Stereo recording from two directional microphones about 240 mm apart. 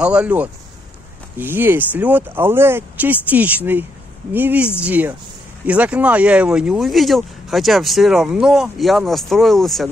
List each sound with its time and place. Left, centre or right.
0.0 s speech: centre